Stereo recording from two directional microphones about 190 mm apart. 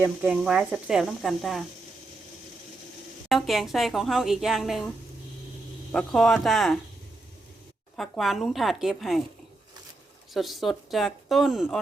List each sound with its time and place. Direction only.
0.0 s speech: 10° right (ahead or behind)
3.2 s speech: centre (ahead or behind)
5.9 s speech: 5° left (ahead or behind)
7.9 s speech: centre (ahead or behind)
10.3 s speech: centre (ahead or behind)